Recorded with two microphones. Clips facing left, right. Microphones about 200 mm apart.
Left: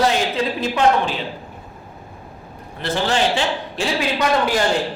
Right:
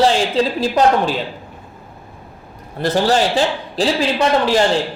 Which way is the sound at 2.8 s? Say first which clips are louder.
Right 4 dB; 40° right (ahead or behind).